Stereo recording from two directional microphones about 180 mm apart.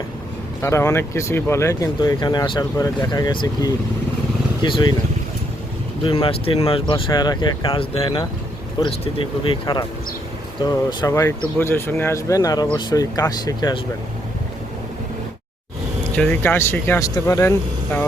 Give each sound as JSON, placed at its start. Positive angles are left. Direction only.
{"t": 0.6, "sound": "speech", "side_deg": 15}
{"t": 6.0, "sound": "speech", "side_deg": 30}
{"t": 16.1, "sound": "speech", "side_deg": 10}